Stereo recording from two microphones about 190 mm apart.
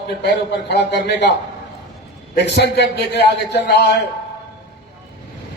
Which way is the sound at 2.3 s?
60° left (ahead or behind).